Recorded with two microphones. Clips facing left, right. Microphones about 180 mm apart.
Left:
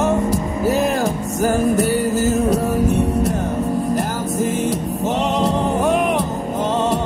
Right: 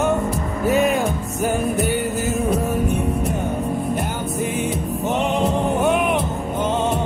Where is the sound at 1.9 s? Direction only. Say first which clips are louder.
Left 4 dB; 40° left (ahead or behind).